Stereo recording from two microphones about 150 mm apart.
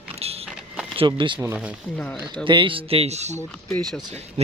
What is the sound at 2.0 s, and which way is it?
Speech, 10° left (ahead or behind).